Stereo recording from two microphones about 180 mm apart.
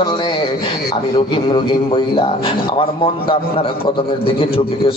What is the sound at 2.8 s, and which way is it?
A man's voice, 30° left (ahead or behind).